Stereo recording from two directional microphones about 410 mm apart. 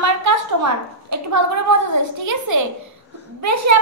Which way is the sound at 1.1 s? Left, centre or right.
Right.